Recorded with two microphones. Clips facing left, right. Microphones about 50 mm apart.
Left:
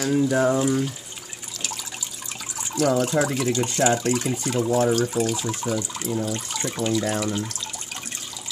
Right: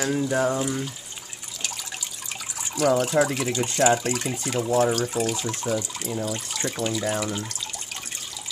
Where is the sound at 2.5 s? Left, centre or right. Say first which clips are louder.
Even; centre.